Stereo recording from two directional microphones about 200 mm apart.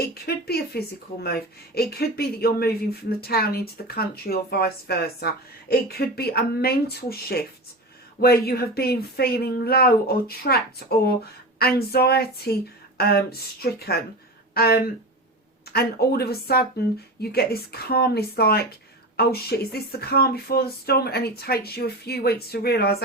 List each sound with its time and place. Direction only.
0.1 s speech: 50° left (ahead or behind)